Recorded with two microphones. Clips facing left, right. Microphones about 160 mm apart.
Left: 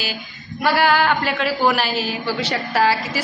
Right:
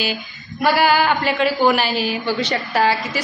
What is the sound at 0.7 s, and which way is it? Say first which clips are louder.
A woman's voice: right 1 dB; centre (ahead or behind).